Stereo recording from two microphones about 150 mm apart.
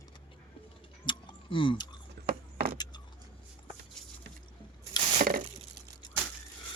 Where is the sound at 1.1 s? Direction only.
35° left (ahead or behind).